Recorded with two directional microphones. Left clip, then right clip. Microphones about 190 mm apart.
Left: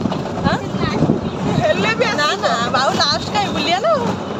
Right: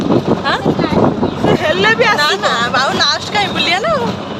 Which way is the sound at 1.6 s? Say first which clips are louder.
Right 4 dB; 35° right (ahead or behind).